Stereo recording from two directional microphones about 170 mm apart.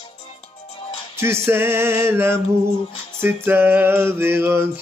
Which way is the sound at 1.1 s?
15° right (ahead or behind).